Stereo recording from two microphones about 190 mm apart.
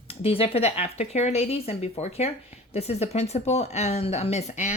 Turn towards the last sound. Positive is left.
turn(degrees=40)  # may be behind; listen again after turning